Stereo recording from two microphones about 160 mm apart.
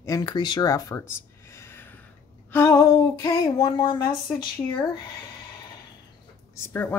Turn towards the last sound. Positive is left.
turn(degrees=10)  # may be behind; listen again after turning